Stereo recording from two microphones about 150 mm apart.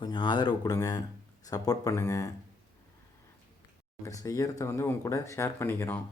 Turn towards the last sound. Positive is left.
turn(degrees=15)  # may be behind; listen again after turning